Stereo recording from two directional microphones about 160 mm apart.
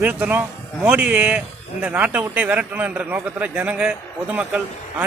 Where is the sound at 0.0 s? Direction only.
10° right (ahead or behind).